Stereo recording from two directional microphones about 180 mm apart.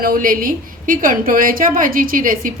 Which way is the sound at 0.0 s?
50° right (ahead or behind).